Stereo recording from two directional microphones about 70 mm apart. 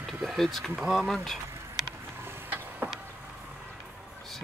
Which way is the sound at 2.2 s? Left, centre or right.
Right.